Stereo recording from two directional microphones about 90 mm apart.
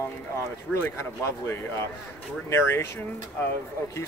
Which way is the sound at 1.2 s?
30° left (ahead or behind).